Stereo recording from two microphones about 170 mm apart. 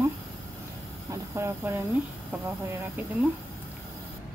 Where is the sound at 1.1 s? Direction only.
15° right (ahead or behind).